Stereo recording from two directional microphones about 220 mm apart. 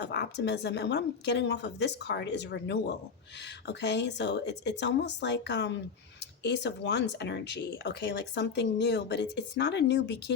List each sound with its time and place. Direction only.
0.0 s speech: 50° left (ahead or behind)